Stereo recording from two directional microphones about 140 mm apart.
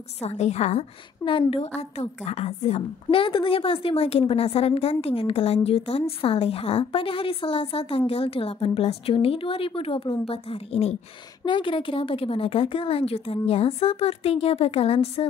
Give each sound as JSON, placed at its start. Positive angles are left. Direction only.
{"t": 0.2, "sound": "a woman's voice", "side_deg": 50}
{"t": 1.2, "sound": "a woman's voice", "side_deg": 40}
{"t": 3.2, "sound": "a woman's voice", "side_deg": 40}
{"t": 11.4, "sound": "a woman's voice", "side_deg": 35}